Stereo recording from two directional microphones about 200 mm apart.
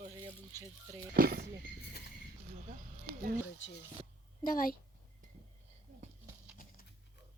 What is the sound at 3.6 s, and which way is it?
Speech, 70° left (ahead or behind).